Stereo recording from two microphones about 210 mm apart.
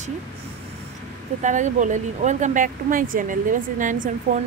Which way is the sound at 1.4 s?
35° right (ahead or behind).